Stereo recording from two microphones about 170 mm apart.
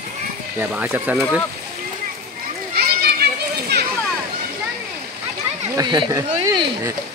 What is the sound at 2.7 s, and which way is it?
Children playing, 65° right (ahead or behind).